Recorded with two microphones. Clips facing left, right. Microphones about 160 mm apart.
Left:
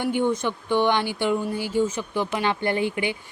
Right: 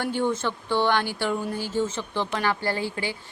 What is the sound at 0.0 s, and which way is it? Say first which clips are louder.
Speech: left 2 dB; 15° left (ahead or behind).